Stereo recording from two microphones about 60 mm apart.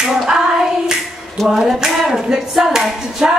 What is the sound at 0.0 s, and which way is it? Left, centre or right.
Child singing, centre.